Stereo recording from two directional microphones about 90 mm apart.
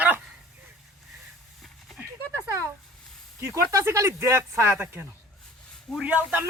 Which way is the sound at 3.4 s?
35° right (ahead or behind).